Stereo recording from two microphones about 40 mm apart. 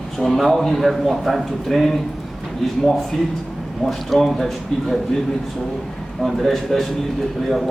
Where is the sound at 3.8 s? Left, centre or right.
Centre.